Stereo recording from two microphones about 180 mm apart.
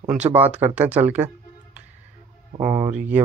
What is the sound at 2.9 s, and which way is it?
Speech, 10° right (ahead or behind).